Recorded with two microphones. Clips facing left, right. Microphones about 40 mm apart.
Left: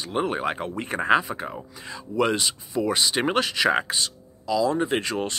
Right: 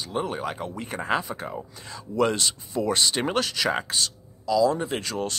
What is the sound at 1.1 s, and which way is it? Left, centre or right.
Speech, centre.